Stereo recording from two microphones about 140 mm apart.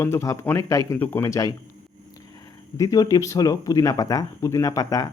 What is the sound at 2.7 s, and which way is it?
Speech, 25° left (ahead or behind).